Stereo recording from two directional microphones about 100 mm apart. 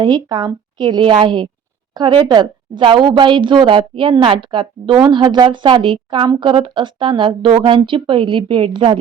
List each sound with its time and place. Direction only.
0.0 s a woman's voice: 45° right (ahead or behind)